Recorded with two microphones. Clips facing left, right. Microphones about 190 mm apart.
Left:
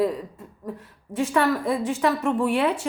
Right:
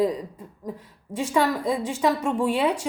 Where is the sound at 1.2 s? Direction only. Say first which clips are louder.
Left 1 dB; 10° right (ahead or behind).